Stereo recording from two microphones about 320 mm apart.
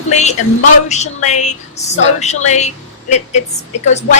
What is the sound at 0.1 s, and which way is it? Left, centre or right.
A woman's voice, left.